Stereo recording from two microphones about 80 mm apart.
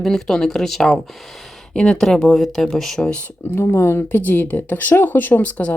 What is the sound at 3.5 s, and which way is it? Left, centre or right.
Speech, left.